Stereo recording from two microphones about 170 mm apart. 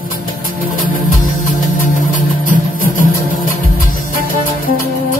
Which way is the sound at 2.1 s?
50° left (ahead or behind).